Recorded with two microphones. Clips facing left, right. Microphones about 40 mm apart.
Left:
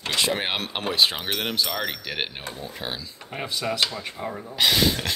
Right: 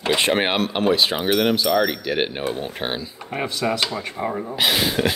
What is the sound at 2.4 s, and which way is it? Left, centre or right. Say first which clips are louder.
Speech: right 8 dB; right.